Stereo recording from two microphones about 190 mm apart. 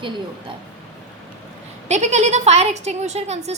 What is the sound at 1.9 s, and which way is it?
A woman's voice, 35° right (ahead or behind).